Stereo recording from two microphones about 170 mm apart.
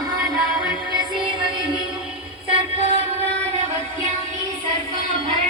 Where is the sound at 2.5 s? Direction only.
35° right (ahead or behind).